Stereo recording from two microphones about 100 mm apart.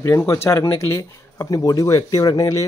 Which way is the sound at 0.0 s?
25° left (ahead or behind).